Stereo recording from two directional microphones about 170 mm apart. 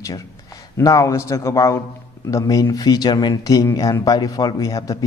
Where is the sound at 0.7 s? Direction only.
20° left (ahead or behind).